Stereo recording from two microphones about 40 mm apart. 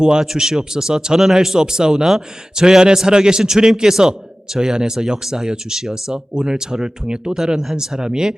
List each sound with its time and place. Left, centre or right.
0.0 s speech: centre